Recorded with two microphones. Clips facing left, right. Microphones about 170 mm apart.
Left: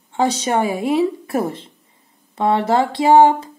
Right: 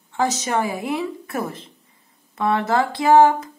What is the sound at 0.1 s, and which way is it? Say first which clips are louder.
A woman's voice: left 4 dB; 30° left (ahead or behind).